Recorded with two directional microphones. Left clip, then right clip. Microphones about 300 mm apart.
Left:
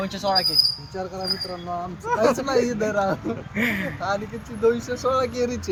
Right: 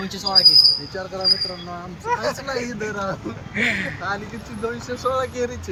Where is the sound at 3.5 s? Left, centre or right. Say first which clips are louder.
Right 4 dB; centre.